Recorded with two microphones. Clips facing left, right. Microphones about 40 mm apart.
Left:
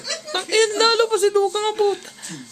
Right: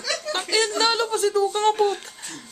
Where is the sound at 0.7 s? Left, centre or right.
Left.